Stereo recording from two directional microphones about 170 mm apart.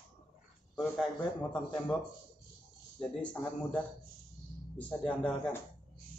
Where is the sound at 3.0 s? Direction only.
5° left (ahead or behind).